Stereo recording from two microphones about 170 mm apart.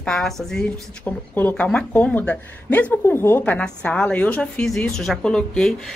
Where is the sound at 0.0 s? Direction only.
5° left (ahead or behind).